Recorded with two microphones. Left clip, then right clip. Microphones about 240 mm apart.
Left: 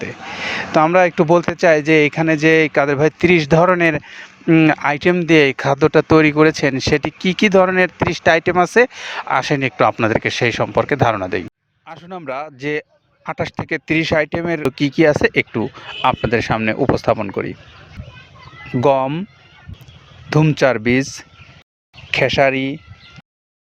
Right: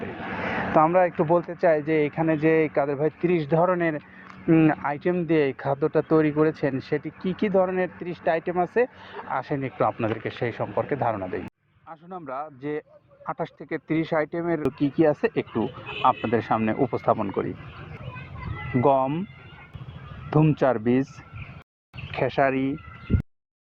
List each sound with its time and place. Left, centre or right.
0.2 s a sound: centre
0.8 s speech: left
18.8 s speech: left
20.3 s speech: left